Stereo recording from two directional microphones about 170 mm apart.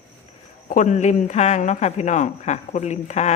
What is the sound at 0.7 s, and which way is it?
A man's voice, 45° left (ahead or behind).